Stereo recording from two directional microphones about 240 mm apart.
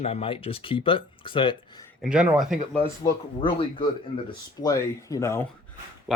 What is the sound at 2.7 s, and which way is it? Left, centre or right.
Speech, centre.